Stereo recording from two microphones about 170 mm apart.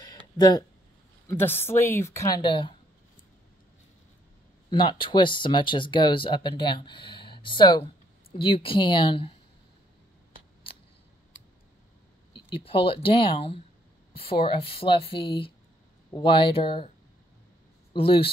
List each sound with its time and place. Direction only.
0.4 s speech: 25° left (ahead or behind)
1.2 s a woman's voice: 10° left (ahead or behind); by 2.7 s 30° left (ahead or behind)
4.6 s speech: 25° left (ahead or behind)
12.4 s speech: 30° left (ahead or behind)
17.9 s speech: 30° left (ahead or behind)